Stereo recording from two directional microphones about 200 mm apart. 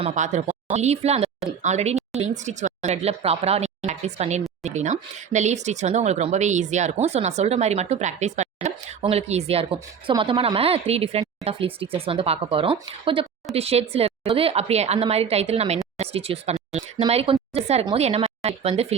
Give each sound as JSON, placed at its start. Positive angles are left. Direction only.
{"t": 0.0, "sound": "a woman's voice", "side_deg": -35}